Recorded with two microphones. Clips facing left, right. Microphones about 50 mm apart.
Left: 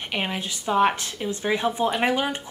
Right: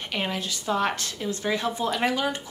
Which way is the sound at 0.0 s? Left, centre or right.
Centre.